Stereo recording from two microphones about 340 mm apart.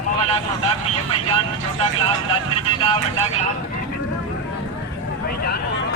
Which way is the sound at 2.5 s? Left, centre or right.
Centre.